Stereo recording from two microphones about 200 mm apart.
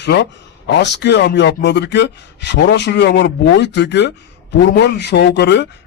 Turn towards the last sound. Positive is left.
turn(degrees=60)  # may be behind; listen again after turning